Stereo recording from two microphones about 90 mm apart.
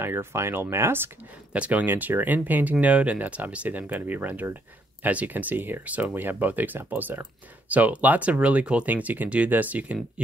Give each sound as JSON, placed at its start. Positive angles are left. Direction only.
{"t": 0.0, "sound": "speech", "side_deg": -25}